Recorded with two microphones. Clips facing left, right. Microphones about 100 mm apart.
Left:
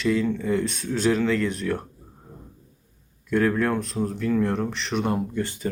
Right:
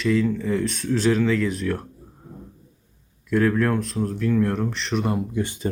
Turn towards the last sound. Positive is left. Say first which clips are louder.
# right 2 dB
turn(degrees=-20)  # may be behind; listen again after turning